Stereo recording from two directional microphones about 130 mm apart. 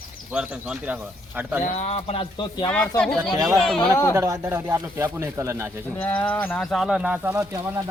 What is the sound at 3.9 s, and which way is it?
Speech, 20° left (ahead or behind).